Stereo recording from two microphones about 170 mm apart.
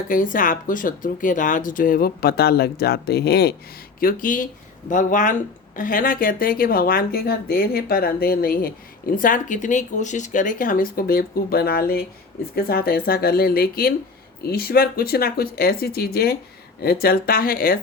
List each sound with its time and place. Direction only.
0.1 s speech: 50° left (ahead or behind); by 3.5 s 70° left (ahead or behind)
4.0 s speech: 55° left (ahead or behind)